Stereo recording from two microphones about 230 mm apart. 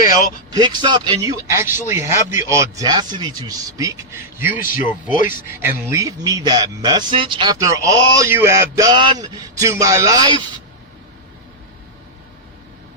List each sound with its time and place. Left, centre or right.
0.5 s speech: centre
4.6 s speech: left
5.5 s speech: centre